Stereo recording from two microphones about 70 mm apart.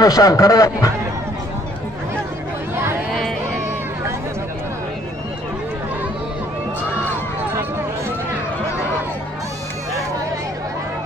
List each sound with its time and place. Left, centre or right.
0.0 s speech: left
2.7 s chatter: right
3.2 s a sound: centre